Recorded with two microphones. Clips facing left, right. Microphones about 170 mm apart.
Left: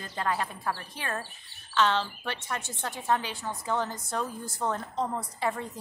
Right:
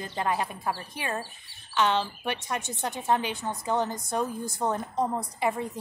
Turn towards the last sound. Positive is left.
turn(degrees=-15)  # may be behind; listen again after turning